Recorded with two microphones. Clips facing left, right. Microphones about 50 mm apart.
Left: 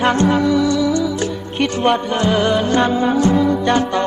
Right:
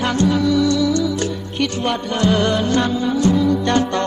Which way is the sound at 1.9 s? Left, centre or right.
Centre.